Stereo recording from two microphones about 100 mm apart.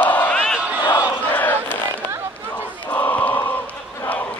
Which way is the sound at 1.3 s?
20° left (ahead or behind).